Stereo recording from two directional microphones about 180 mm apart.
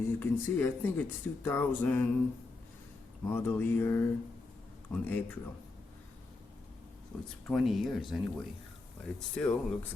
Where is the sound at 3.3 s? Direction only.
10° left (ahead or behind).